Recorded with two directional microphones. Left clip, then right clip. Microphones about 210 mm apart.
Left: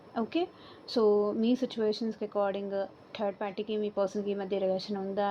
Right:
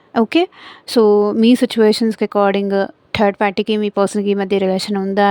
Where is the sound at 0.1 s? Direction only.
70° right (ahead or behind).